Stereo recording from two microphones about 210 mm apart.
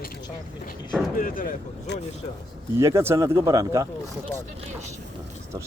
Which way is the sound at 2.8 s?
15° right (ahead or behind).